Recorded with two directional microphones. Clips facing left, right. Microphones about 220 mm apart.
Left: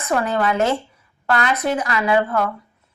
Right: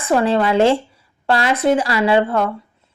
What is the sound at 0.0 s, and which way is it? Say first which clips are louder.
A woman's voice: right 4 dB; 30° right (ahead or behind).